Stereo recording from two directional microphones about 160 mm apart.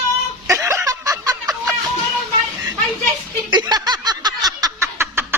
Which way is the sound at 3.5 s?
25° right (ahead or behind).